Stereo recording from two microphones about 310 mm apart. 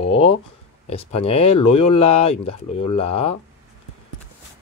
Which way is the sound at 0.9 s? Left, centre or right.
Centre.